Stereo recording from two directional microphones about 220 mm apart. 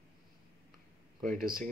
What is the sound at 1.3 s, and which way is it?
Speech, 40° right (ahead or behind).